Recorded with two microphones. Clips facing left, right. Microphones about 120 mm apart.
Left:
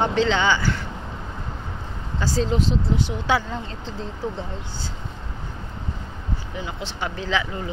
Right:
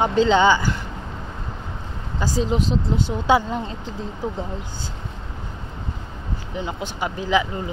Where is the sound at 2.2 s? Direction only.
15° right (ahead or behind).